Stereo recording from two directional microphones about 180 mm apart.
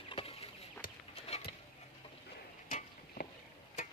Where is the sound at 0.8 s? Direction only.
50° left (ahead or behind).